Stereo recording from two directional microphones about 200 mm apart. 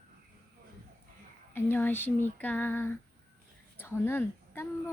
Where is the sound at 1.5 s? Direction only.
10° left (ahead or behind).